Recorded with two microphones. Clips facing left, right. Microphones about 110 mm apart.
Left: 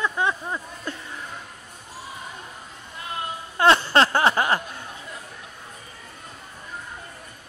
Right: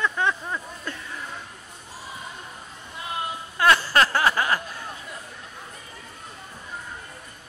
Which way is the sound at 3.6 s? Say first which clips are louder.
Left 2 dB; 25° left (ahead or behind).